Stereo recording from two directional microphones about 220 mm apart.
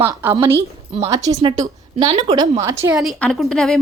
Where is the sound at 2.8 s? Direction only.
5° right (ahead or behind).